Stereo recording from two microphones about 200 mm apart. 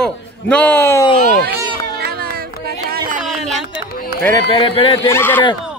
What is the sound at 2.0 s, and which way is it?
Music, 50° right (ahead or behind).